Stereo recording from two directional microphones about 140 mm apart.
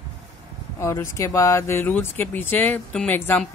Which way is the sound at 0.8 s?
20° left (ahead or behind).